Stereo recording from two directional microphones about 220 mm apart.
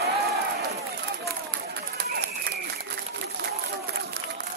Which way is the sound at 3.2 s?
45° right (ahead or behind).